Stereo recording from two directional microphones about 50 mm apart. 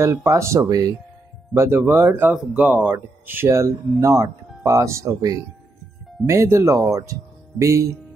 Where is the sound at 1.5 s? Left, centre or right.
Right.